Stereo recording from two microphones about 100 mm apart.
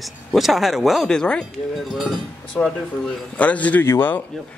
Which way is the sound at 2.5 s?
20° left (ahead or behind).